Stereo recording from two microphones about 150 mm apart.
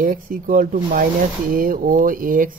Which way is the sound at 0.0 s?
65° right (ahead or behind).